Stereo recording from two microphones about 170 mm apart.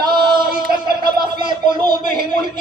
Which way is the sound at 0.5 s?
60° right (ahead or behind).